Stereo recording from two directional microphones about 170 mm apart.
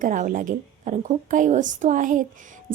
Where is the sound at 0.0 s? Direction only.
50° right (ahead or behind).